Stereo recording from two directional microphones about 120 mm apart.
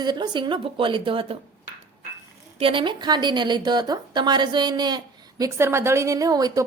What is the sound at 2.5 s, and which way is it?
A woman's voice, 45° right (ahead or behind).